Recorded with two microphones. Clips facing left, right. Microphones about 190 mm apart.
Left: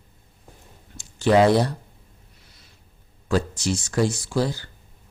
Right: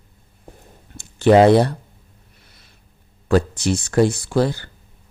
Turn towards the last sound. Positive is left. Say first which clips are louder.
# right 5 dB
turn(degrees=-60)  # may be behind; listen again after turning